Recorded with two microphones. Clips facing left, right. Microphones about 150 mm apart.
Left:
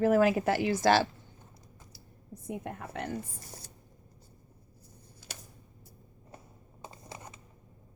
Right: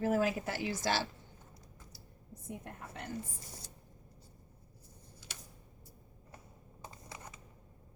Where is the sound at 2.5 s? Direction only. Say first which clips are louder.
Left 8 dB; 85° left.